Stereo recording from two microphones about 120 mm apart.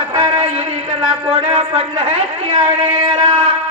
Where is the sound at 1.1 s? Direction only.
45° right (ahead or behind).